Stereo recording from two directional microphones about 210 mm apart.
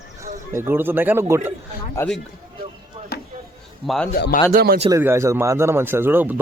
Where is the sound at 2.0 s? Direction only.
10° left (ahead or behind).